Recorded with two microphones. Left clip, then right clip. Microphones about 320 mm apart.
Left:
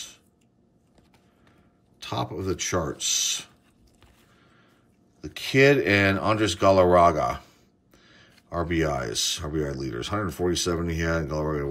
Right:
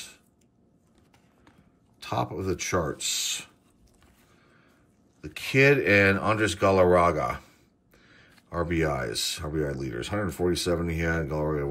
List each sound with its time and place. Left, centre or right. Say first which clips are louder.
2.0 s speech: right 1 dB; centre
5.2 s speech: left 2 dB; centre